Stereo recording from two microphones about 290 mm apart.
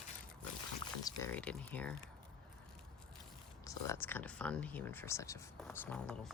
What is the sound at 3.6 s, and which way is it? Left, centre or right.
Speech, centre.